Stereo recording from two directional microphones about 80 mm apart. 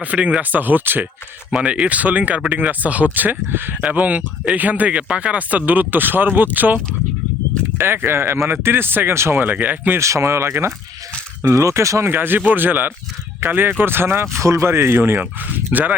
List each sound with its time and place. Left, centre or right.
0.0 s speech: centre
7.8 s speech: right
10.0 s speech: right